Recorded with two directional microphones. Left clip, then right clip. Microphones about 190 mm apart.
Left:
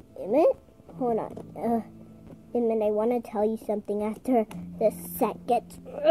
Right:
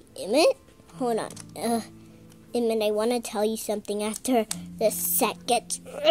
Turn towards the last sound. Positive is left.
turn(degrees=-10)  # may be behind; listen again after turning